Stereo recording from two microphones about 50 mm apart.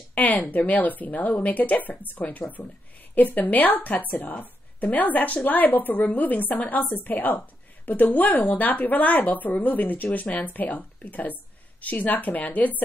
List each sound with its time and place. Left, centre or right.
0.1 s a woman's voice: left